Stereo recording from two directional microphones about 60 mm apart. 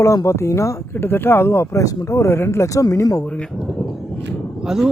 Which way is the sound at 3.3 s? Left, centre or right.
Centre.